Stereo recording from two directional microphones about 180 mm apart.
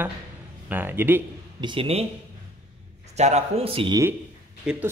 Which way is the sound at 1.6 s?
30° right (ahead or behind).